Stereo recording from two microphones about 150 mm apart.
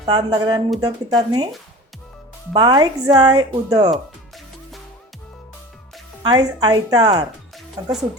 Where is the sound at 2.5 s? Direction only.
30° right (ahead or behind).